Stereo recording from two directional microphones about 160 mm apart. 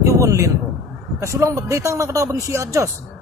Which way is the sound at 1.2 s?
20° right (ahead or behind).